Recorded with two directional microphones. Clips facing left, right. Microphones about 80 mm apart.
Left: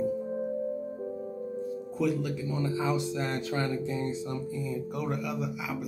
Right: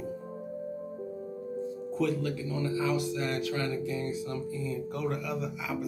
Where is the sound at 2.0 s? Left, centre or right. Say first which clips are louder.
Left 1 dB; centre.